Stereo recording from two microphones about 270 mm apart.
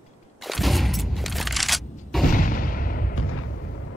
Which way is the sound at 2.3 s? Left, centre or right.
Left.